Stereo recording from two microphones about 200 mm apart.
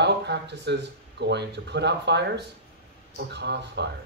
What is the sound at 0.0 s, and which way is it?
Speech, 60° right (ahead or behind).